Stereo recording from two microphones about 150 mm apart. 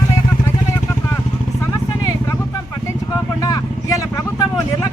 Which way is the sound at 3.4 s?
25° left (ahead or behind).